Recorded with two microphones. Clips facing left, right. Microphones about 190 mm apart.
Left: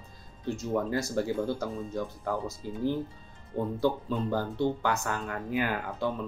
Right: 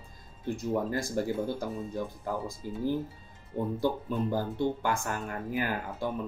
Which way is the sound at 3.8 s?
15° right (ahead or behind).